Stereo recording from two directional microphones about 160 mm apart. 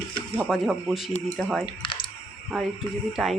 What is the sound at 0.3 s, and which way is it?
Speech, 5° right (ahead or behind).